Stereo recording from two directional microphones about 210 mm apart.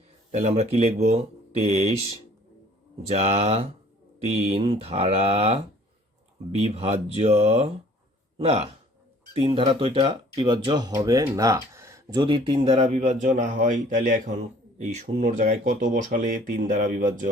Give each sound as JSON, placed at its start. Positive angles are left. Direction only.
{"t": 0.3, "sound": "speech", "side_deg": -30}
{"t": 3.1, "sound": "speech", "side_deg": -30}